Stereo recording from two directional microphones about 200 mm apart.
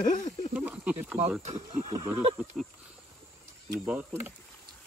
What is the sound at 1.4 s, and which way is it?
Speech, 35° right (ahead or behind).